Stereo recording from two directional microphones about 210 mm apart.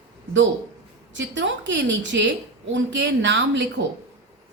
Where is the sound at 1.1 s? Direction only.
60° right (ahead or behind).